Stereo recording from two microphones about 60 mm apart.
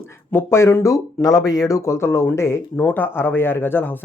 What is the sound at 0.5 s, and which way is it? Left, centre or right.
Speech, left.